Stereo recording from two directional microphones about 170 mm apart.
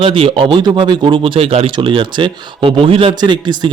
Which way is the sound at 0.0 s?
30° right (ahead or behind).